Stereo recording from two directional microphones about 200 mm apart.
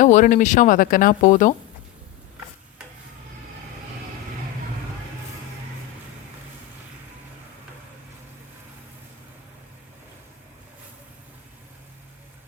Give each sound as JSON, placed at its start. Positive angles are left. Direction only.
{"t": 0.0, "sound": "speech", "side_deg": 40}